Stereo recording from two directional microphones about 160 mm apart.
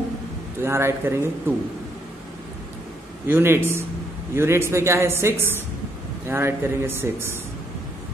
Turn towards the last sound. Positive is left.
turn(degrees=-15)  # may be behind; listen again after turning